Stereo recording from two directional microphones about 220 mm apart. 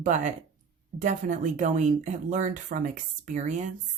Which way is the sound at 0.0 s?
35° right (ahead or behind).